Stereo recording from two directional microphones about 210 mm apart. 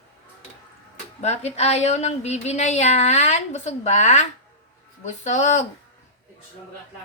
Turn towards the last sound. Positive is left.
turn(degrees=35)  # may be behind; listen again after turning